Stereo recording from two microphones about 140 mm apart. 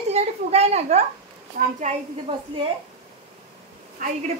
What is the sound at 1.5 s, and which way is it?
Speech, 70° right (ahead or behind).